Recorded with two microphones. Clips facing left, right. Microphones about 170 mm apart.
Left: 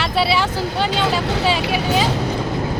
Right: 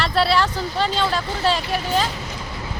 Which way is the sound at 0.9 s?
75° left (ahead or behind).